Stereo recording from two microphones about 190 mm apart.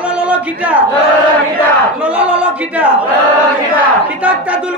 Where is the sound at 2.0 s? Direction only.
5° right (ahead or behind).